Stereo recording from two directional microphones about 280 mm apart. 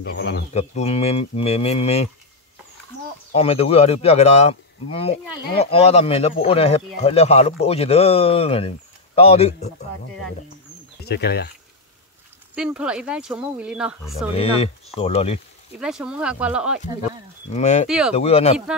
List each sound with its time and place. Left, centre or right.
0.0 s speech: left
0.5 s speech: left
3.3 s speech: left
11.1 s speech: left
12.5 s speech: centre
14.3 s speech: left
15.8 s speech: centre
17.5 s speech: left
17.8 s speech: centre
18.1 s speech: left